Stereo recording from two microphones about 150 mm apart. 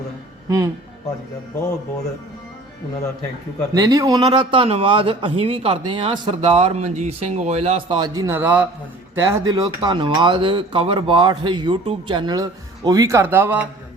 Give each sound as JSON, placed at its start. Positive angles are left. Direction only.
{"t": 0.4, "sound": "speech", "side_deg": -20}
{"t": 3.8, "sound": "speech", "side_deg": -20}
{"t": 7.9, "sound": "a man's voice", "side_deg": -25}